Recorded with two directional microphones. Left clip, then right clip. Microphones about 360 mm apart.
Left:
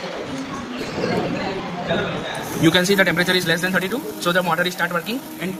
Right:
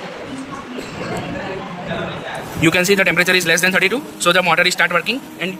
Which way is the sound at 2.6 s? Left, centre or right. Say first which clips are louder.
Right 2 dB; right.